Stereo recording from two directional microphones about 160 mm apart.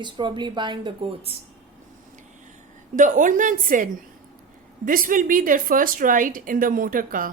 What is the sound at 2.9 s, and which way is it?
A woman's voice, 55° right (ahead or behind).